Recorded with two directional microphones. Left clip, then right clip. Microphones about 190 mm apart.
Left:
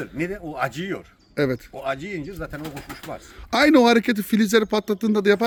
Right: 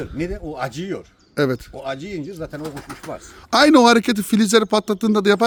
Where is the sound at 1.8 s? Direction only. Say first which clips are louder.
Even; centre (ahead or behind).